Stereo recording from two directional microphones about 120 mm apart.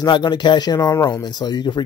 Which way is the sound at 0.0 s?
35° left (ahead or behind).